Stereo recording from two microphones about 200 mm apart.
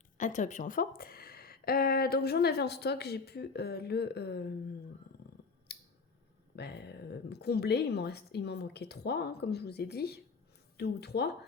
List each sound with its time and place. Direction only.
0.2 s speech: 40° left (ahead or behind); by 4.5 s 55° left (ahead or behind)
5.7 s scissors: 55° left (ahead or behind)
6.6 s a woman's voice: 55° left (ahead or behind)